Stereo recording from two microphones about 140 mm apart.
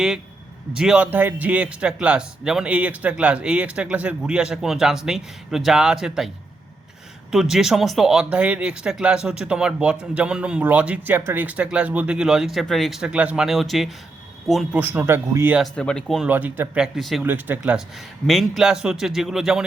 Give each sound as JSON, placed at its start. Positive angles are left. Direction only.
{"t": 0.7, "sound": "a man's voice", "side_deg": -5}
{"t": 14.8, "sound": "a man's voice", "side_deg": -15}
{"t": 15.7, "sound": "speech", "side_deg": 5}
{"t": 16.3, "sound": "speech", "side_deg": -15}
{"t": 17.2, "sound": "speech", "side_deg": -15}